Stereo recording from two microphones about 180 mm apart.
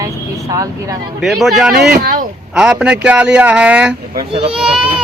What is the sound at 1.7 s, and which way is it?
Speech, 60° right (ahead or behind).